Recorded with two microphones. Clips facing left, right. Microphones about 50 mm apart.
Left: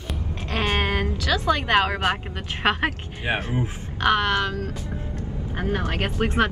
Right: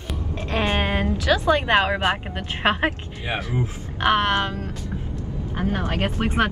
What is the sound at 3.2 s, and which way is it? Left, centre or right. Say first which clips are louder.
Speech: left 1 dB; left.